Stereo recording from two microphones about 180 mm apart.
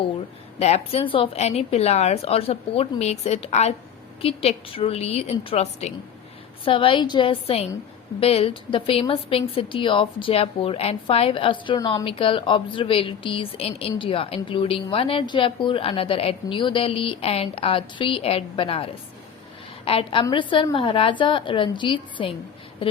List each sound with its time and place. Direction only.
0.6 s a woman's voice: 35° left (ahead or behind)